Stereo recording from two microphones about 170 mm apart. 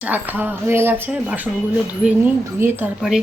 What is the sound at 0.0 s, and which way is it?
Speech, 10° right (ahead or behind).